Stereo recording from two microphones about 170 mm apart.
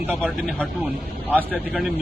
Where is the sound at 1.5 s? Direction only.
Centre (ahead or behind).